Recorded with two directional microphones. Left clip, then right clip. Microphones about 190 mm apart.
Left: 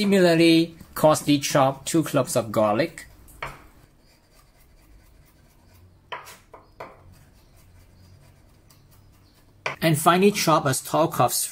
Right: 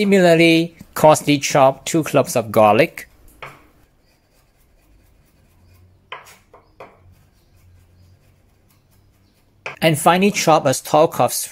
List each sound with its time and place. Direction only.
0.0 s speech: 40° right (ahead or behind)
9.8 s speech: 35° right (ahead or behind)